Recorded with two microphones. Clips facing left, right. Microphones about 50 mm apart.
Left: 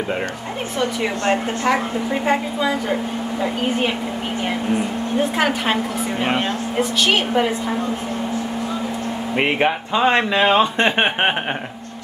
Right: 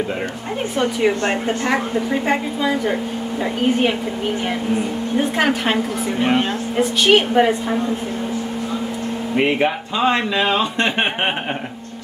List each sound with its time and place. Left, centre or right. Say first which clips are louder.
6.2 s speech: right 3 dB; centre
7.1 s a woman's voice: right 7 dB; centre
9.3 s speech: right 1 dB; left